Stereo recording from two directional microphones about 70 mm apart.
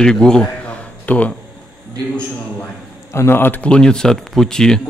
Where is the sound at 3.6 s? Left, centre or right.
Centre.